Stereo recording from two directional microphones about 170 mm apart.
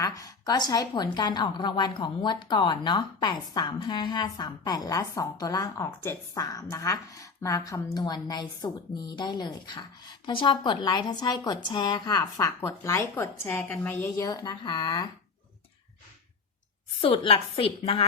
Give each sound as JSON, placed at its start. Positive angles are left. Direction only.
{"t": 0.0, "sound": "a woman's voice", "side_deg": 20}
{"t": 17.0, "sound": "a woman's voice", "side_deg": 35}